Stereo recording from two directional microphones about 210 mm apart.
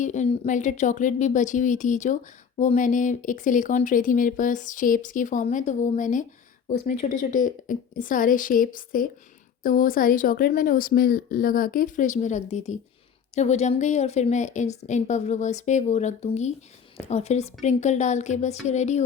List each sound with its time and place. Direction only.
0.0 s a woman's voice: 35° left (ahead or behind)